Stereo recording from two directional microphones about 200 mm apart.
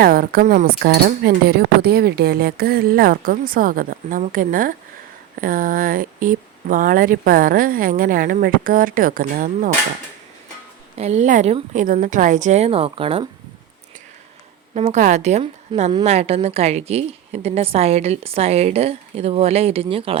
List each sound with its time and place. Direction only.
0.0 s speech: 50° right (ahead or behind)
0.8 s speech: 50° right (ahead or behind)
10.9 s a woman's voice: 35° right (ahead or behind)
14.8 s a woman's voice: 35° right (ahead or behind)